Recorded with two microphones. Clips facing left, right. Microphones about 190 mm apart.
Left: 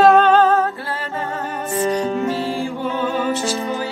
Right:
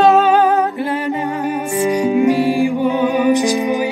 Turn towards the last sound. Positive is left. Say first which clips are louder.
# right 7 dB
turn(degrees=-15)  # may be behind; listen again after turning